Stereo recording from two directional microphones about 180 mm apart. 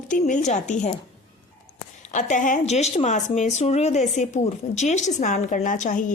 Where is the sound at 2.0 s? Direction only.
40° left (ahead or behind).